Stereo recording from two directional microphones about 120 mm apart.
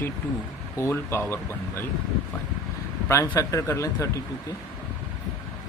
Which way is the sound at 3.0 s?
25° left (ahead or behind).